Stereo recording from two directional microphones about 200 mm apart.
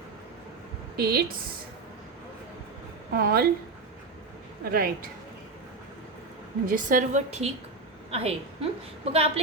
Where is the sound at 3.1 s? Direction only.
50° right (ahead or behind).